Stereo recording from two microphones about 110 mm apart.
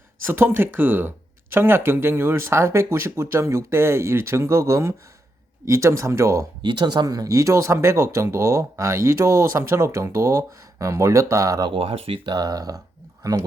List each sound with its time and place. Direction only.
0.3 s speech: 20° right (ahead or behind)
6.6 s speech: 45° right (ahead or behind)
11.6 s speech: 55° right (ahead or behind)
12.3 s speech: 35° right (ahead or behind)